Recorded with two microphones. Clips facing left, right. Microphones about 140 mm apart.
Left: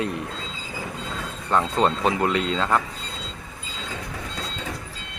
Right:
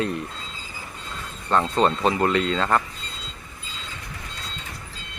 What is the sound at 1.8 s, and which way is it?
Speech, 15° left (ahead or behind).